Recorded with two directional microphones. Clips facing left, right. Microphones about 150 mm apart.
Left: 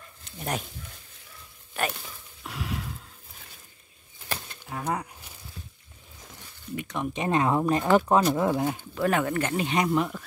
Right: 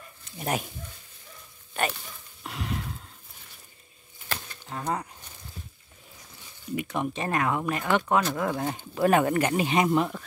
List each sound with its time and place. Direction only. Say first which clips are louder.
0.4 s speech: right 2 dB; 5° right (ahead or behind)
1.7 s speech: right 1 dB; centre (ahead or behind)
2.4 s a sound: right 1 dB; centre (ahead or behind)
4.3 s a sound: left 1 dB; 10° left (ahead or behind)
6.7 s speech: right 2 dB; 10° right (ahead or behind)
7.2 s speech: left 6 dB; 25° left (ahead or behind)
8.4 s speech: left 4 dB; 20° left (ahead or behind)
8.9 s speech: right 5 dB; 20° right (ahead or behind)
9.4 s speech: right 2 dB; 10° right (ahead or behind)